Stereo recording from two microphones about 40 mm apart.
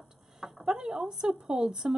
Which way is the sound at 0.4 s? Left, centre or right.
Centre.